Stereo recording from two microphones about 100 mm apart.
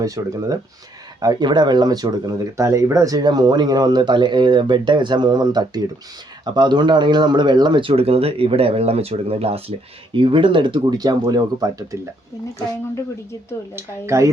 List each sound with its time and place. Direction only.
0.0 s speech: 35° right (ahead or behind); by 9.7 s 75° right (ahead or behind)
10.2 s speech: 60° right (ahead or behind); by 11.9 s 35° right (ahead or behind)
13.7 s speech: 30° right (ahead or behind)